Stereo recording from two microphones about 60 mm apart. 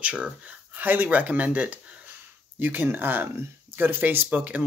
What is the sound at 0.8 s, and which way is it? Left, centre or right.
Speech, right.